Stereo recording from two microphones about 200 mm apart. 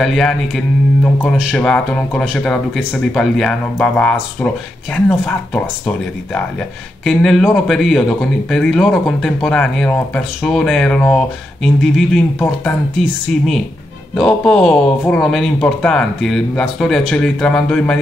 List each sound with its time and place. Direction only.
0.0 s speech: centre (ahead or behind)
14.1 s speech: centre (ahead or behind)